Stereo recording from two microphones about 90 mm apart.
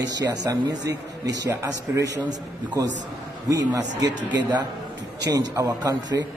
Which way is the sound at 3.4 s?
40° right (ahead or behind).